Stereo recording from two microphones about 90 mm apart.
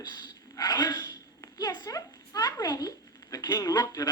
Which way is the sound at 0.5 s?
50° left (ahead or behind).